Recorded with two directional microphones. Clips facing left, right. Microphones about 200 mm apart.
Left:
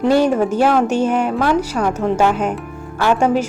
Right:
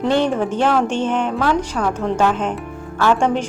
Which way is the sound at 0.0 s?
5° left (ahead or behind).